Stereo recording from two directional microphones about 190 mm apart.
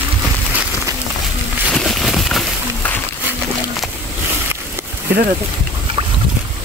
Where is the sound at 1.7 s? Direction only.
Centre (ahead or behind).